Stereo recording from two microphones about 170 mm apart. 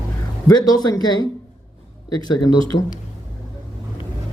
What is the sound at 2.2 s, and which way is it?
Speech, 25° left (ahead or behind).